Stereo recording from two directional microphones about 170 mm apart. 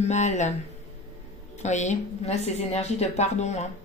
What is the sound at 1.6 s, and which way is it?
A woman's voice, 45° left (ahead or behind).